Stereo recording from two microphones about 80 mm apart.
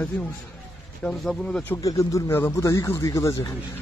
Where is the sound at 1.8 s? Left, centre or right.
Left.